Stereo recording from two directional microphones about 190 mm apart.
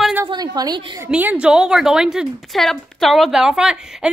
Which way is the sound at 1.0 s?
10° right (ahead or behind).